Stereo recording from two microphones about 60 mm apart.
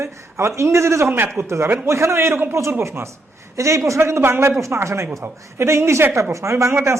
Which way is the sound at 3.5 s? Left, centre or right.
Right.